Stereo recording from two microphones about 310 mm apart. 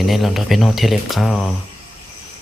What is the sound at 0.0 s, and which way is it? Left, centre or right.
Speech, centre.